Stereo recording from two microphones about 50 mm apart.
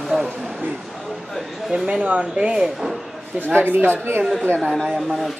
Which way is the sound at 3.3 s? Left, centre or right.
Right.